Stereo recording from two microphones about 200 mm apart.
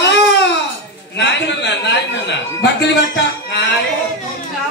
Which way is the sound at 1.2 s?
60° left (ahead or behind).